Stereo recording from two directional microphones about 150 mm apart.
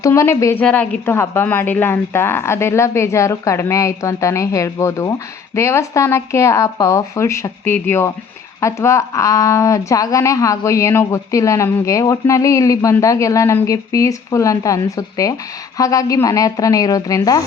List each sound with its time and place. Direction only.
0.0 s a woman's voice: 20° left (ahead or behind)